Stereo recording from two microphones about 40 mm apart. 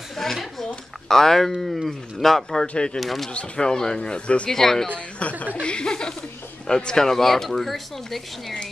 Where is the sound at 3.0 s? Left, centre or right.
Centre.